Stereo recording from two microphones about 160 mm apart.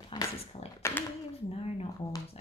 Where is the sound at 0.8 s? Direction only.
15° left (ahead or behind).